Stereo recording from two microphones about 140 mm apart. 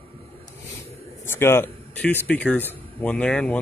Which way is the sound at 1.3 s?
15° left (ahead or behind).